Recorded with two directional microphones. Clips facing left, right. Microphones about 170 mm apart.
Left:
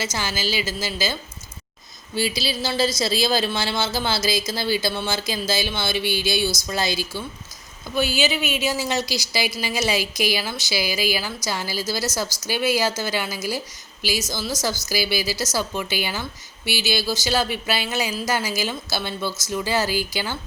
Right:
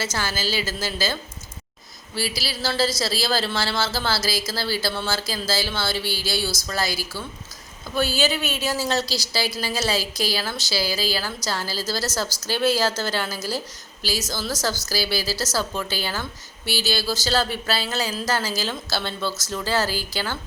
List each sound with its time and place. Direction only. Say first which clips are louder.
0.0 s a woman's voice: even; 15° left (ahead or behind)